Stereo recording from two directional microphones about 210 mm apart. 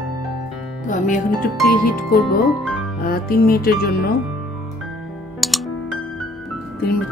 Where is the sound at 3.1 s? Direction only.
45° left (ahead or behind).